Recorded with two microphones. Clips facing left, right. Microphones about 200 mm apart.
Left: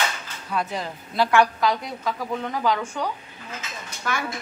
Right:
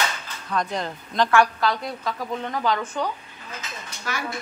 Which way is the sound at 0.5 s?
5° left (ahead or behind).